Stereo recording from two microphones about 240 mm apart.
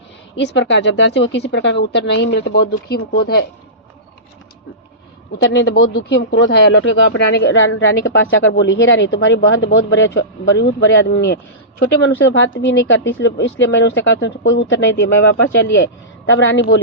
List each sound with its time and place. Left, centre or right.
0.3 s speech: left
5.4 s speech: left